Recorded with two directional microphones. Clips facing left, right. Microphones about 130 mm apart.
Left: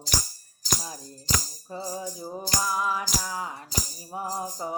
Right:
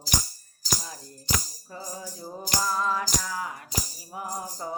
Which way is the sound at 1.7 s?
25° left (ahead or behind).